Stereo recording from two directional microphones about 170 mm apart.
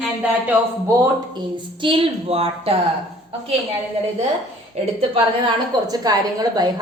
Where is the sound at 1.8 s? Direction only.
30° right (ahead or behind).